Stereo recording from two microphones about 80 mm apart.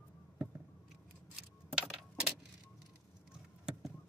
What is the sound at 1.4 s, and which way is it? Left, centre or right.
Keys jangling, centre.